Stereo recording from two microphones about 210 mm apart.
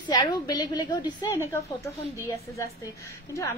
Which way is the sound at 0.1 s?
20° left (ahead or behind).